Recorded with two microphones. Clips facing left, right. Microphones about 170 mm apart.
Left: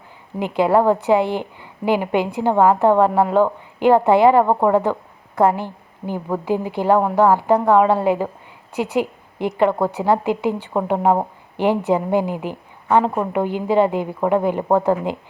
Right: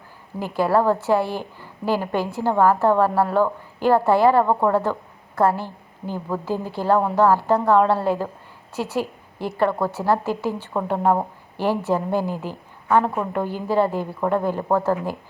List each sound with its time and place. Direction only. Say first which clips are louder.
0.3 s a woman's voice: left 3 dB; 20° left (ahead or behind)